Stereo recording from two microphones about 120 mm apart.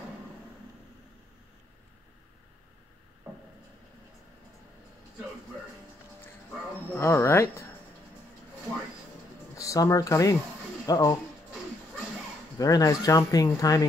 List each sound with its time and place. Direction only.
7.0 s speech: 20° left (ahead or behind)
9.6 s speech: 25° left (ahead or behind)
12.5 s speech: 30° left (ahead or behind)